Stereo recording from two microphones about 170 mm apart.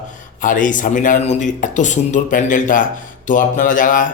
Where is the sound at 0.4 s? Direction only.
50° left (ahead or behind).